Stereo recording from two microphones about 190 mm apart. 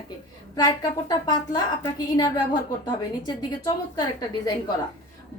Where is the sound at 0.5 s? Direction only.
20° left (ahead or behind).